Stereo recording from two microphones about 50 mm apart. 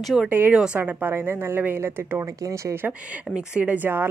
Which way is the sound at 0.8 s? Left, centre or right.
Right.